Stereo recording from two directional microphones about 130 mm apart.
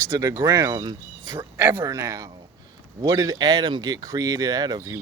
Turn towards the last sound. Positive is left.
turn(degrees=-30)  # may be behind; listen again after turning